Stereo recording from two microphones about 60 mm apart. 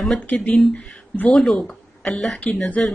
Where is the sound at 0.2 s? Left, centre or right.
Left.